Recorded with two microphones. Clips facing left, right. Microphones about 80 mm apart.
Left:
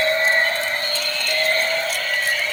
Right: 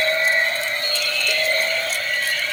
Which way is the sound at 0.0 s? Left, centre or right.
Left.